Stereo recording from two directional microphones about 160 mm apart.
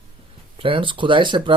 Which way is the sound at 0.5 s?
35° right (ahead or behind).